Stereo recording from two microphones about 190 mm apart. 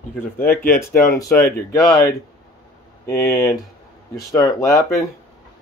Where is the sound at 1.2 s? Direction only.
15° left (ahead or behind).